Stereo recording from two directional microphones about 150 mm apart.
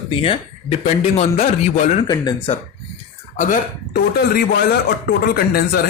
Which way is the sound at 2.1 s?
25° left (ahead or behind).